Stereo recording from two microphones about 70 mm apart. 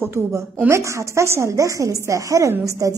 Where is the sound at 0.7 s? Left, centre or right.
Right.